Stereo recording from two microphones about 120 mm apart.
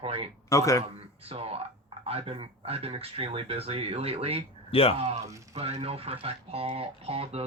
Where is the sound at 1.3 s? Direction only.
55° right (ahead or behind).